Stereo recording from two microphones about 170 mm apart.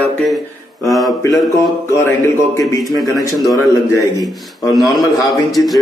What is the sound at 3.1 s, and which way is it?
Speech, 20° left (ahead or behind).